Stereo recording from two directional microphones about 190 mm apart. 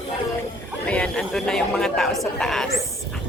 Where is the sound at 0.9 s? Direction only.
5° left (ahead or behind).